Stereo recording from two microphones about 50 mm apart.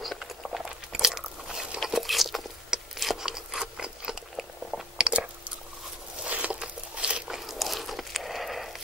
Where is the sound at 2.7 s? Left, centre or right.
Centre.